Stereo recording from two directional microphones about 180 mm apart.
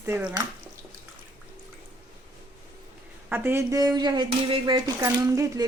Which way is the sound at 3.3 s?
15° right (ahead or behind).